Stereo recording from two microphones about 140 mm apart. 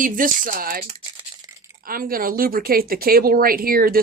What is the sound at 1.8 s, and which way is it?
Speech, 90° right.